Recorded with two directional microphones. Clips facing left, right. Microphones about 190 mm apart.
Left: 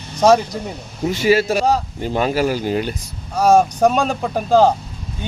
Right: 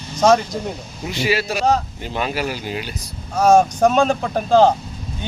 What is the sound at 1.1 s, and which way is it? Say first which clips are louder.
Speech: left 6 dB; 45° left (ahead or behind).